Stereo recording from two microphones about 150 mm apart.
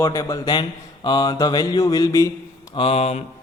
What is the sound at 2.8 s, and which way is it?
Speech, 40° left (ahead or behind).